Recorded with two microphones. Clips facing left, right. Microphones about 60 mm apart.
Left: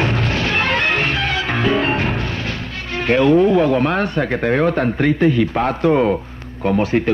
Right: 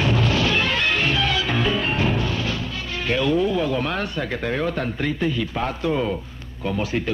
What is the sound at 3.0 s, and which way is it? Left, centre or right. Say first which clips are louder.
Speech: left 8 dB; left.